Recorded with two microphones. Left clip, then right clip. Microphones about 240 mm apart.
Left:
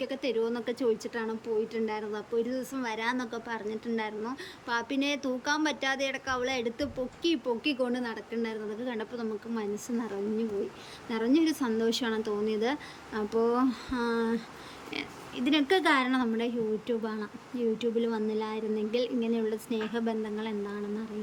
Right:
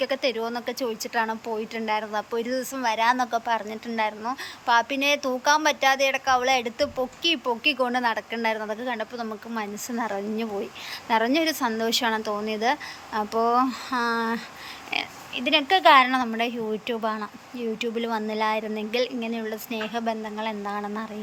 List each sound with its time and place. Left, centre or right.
0.0 s a woman's voice: centre